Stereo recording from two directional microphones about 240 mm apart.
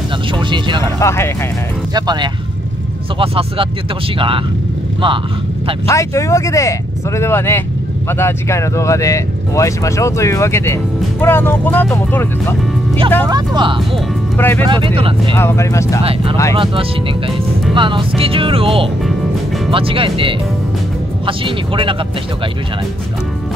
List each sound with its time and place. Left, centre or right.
0.3 s speech: centre
0.9 s speech: centre
2.0 s speech: centre
5.9 s speech: centre
13.3 s speech: centre
13.9 s speech: centre
14.6 s speech: right
15.3 s speech: centre
16.0 s speech: right
17.7 s speech: right